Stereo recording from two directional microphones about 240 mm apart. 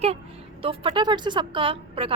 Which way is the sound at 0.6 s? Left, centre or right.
Right.